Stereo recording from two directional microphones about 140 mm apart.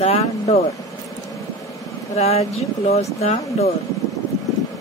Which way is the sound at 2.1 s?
45° left (ahead or behind).